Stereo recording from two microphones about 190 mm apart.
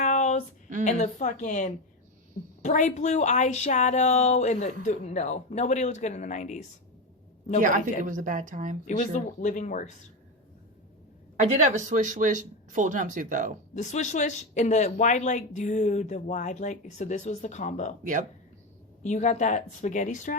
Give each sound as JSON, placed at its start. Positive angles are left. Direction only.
{"t": 0.0, "sound": "a sound", "side_deg": 40}
{"t": 0.9, "sound": "speech", "side_deg": 40}
{"t": 7.6, "sound": "a woman's voice", "side_deg": -45}
{"t": 8.9, "sound": "speech", "side_deg": 40}
{"t": 11.3, "sound": "speech", "side_deg": -40}
{"t": 13.7, "sound": "speech", "side_deg": 40}
{"t": 18.0, "sound": "a woman's voice", "side_deg": -45}
{"t": 19.0, "sound": "speech", "side_deg": 40}